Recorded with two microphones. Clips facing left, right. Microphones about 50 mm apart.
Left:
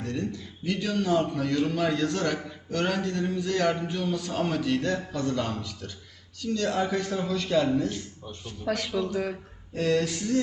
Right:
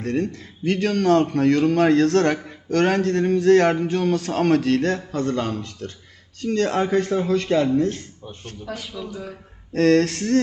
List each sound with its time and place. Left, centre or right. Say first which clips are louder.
0.0 s a man's voice: right 7 dB; right
8.6 s speech: left 4 dB; left
8.9 s speech: left 4 dB; centre
9.7 s speech: right 8 dB; right